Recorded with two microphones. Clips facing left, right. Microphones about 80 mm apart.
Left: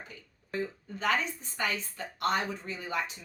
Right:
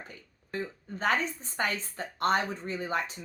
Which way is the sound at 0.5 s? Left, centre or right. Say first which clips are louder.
Left 1 dB; right.